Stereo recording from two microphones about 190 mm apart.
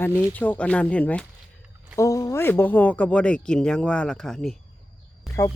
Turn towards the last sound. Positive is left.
turn(degrees=0)  # may be behind; listen again after turning